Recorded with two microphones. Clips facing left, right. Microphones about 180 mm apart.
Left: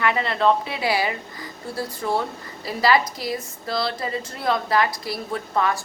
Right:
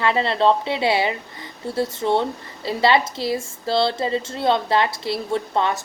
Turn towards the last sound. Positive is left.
turn(degrees=-25)  # may be behind; listen again after turning